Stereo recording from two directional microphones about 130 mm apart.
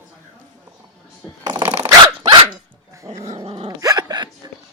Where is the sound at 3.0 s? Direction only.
25° right (ahead or behind).